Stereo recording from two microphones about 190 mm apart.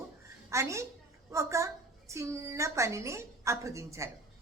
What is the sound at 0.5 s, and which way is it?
A woman's voice, 15° right (ahead or behind).